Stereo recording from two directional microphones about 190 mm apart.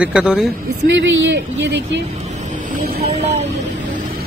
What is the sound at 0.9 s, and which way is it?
Speech, 75° right (ahead or behind).